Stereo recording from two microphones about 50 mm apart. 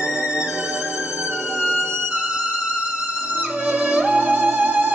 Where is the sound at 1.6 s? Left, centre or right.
Centre.